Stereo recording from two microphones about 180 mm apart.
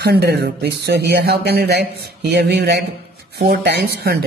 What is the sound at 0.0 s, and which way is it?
A man's voice, 60° right (ahead or behind).